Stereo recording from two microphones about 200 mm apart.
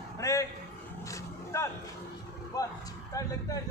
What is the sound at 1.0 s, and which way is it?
Roaring cats, 15° left (ahead or behind).